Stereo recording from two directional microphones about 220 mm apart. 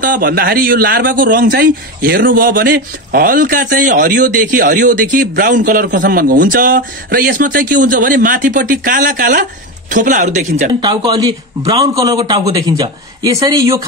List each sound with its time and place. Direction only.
0.0 s a man's voice: 40° right (ahead or behind)
10.7 s a man's voice: 20° right (ahead or behind)